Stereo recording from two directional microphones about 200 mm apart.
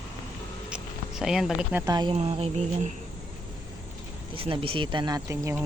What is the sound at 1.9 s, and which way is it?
Speech, 20° right (ahead or behind).